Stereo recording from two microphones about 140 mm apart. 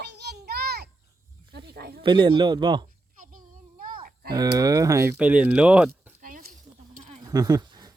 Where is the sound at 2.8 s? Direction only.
75° right (ahead or behind).